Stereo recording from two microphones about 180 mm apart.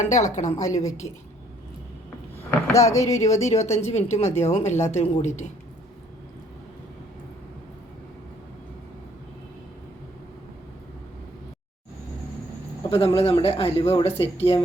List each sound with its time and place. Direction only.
0.0 s speech: 40° left (ahead or behind)
2.5 s speech: 15° left (ahead or behind)
3.2 s speech: 40° left (ahead or behind)
13.1 s speech: 30° left (ahead or behind)